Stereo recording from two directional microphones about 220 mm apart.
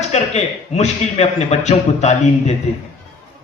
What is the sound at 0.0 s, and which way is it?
A man's voice, 30° left (ahead or behind).